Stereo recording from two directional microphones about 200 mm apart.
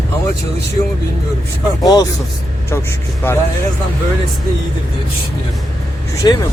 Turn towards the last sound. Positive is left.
turn(degrees=20)  # may be behind; listen again after turning